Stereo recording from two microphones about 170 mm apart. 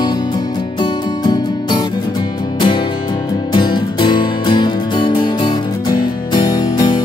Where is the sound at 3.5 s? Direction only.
30° left (ahead or behind).